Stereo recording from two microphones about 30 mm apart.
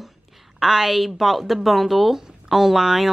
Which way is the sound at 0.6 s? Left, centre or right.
Centre.